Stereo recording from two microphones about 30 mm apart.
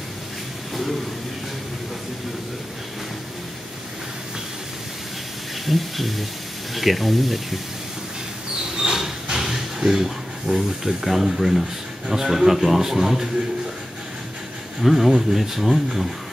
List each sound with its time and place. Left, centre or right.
5.7 s speech: centre
8.7 s a sound: centre
12.1 s a man's voice: centre
14.8 s a man's voice: centre